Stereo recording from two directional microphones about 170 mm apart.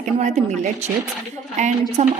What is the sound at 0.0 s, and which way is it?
A woman's voice, 45° right (ahead or behind).